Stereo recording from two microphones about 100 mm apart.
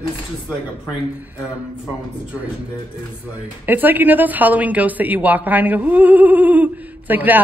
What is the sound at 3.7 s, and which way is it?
Speech, 20° right (ahead or behind).